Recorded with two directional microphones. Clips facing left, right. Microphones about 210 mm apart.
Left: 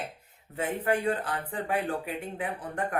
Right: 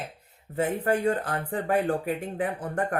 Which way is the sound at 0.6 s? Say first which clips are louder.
Right 3 dB; 40° right (ahead or behind).